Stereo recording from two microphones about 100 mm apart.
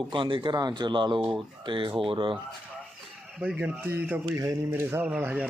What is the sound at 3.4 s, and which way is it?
Speech, 15° right (ahead or behind).